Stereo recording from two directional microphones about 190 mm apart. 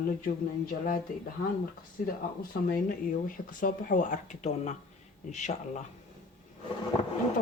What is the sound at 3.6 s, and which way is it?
Speech, 45° left (ahead or behind).